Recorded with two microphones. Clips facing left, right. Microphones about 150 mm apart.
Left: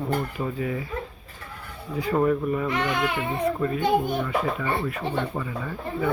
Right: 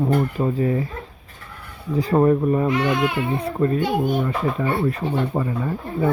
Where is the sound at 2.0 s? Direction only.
35° right (ahead or behind).